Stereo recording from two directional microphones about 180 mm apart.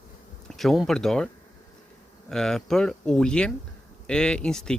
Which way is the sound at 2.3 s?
5° left (ahead or behind).